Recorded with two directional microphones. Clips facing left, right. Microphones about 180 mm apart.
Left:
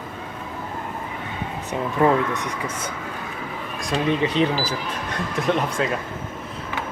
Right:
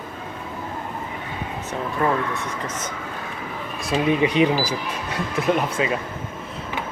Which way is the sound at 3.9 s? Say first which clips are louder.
Right 2 dB; 10° right (ahead or behind).